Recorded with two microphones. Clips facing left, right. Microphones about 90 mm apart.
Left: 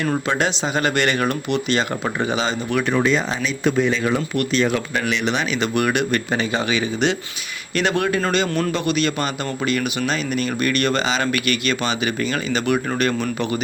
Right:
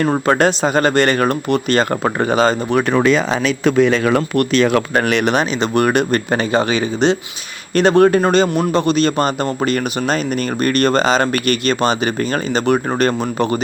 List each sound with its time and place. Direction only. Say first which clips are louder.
0.0 s speech: right 6 dB; 45° right (ahead or behind)
2.9 s speech: right 5 dB; 80° right
4.9 s speech: right 6 dB; 55° right (ahead or behind)
5.5 s speech: right 5 dB; 40° right (ahead or behind)